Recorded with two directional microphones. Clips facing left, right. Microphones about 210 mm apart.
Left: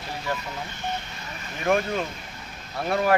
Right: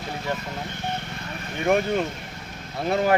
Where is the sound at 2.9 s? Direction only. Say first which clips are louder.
Right 1 dB; 25° right (ahead or behind).